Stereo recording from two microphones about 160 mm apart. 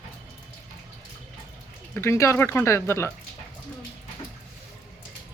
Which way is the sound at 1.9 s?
15° left (ahead or behind).